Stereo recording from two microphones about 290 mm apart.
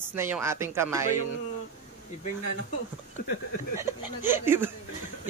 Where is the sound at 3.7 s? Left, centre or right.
Centre.